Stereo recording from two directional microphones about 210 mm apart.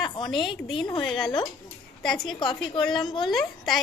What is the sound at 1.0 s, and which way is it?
A woman's voice, centre (ahead or behind).